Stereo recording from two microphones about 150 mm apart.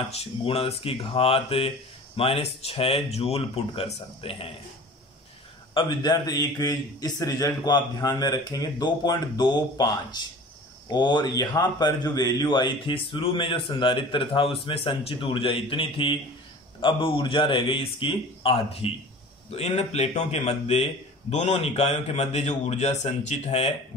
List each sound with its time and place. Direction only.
0.2 s a man's voice: 40° left (ahead or behind)
5.8 s a man's voice: 30° left (ahead or behind)
19.5 s a man's voice: 45° left (ahead or behind)